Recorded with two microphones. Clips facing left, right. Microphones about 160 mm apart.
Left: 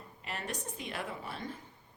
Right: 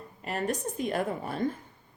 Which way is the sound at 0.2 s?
45° right (ahead or behind).